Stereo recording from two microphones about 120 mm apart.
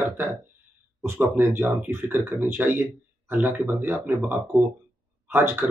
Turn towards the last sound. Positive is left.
turn(degrees=-20)  # may be behind; listen again after turning